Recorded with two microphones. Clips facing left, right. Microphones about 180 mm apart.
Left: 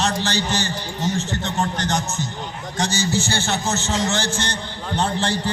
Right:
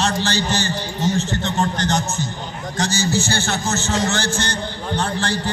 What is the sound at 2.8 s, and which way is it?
A man's voice, 25° left (ahead or behind).